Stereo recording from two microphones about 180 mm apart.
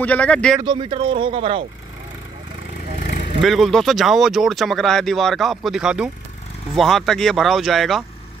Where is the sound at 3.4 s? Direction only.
Centre (ahead or behind).